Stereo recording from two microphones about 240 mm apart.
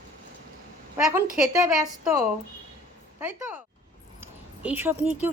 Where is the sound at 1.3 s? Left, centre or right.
Centre.